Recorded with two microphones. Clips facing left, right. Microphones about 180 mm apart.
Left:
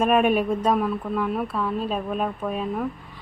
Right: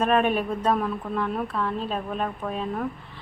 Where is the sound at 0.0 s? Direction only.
10° left (ahead or behind).